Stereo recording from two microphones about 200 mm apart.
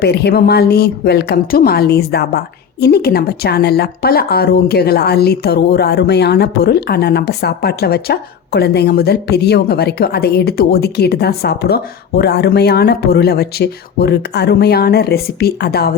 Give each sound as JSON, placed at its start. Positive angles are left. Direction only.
{"t": 0.0, "sound": "speech", "side_deg": 55}